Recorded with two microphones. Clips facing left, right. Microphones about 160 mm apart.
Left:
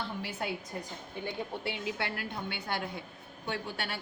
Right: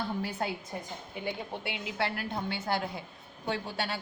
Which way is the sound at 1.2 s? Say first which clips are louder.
Even; 15° right (ahead or behind).